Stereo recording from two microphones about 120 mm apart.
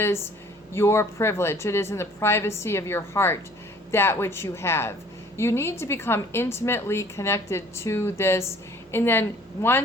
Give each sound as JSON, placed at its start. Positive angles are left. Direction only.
{"t": 0.7, "sound": "a woman's voice", "side_deg": 20}